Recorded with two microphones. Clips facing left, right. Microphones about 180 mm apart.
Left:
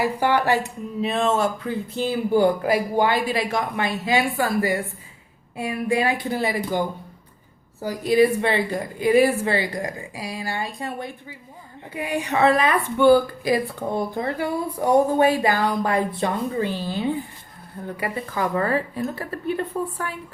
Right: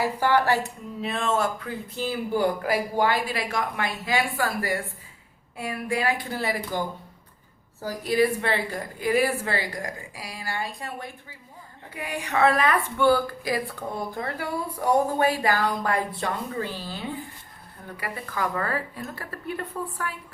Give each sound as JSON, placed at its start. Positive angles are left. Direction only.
{"t": 0.0, "sound": "a woman's voice", "side_deg": 20}